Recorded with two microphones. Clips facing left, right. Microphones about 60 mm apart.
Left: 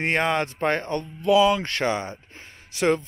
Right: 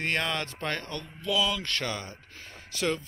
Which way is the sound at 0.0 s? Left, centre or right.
Left.